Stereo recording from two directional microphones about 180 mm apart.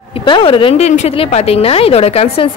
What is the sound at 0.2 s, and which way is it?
A woman's voice, 30° left (ahead or behind).